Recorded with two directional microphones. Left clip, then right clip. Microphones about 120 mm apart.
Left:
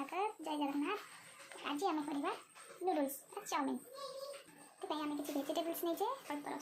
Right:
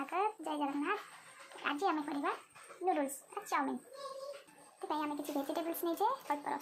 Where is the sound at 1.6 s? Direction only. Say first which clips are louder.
Right 4 dB; centre (ahead or behind).